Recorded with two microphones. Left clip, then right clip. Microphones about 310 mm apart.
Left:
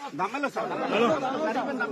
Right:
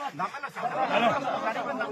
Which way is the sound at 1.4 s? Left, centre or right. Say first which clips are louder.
Left 2 dB; centre.